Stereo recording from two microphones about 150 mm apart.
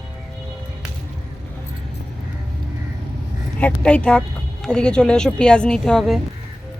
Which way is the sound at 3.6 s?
5° left (ahead or behind).